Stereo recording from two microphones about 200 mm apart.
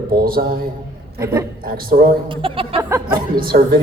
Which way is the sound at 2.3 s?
25° right (ahead or behind).